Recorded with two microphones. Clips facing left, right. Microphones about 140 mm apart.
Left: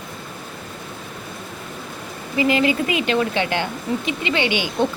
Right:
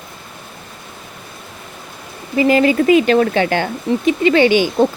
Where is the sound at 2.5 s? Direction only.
40° right (ahead or behind).